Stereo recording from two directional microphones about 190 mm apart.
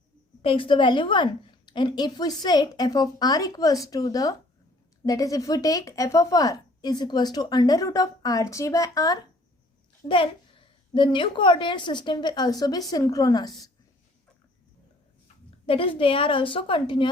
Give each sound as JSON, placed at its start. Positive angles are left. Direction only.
{"t": 0.4, "sound": "speech", "side_deg": 25}
{"t": 15.4, "sound": "speech", "side_deg": 30}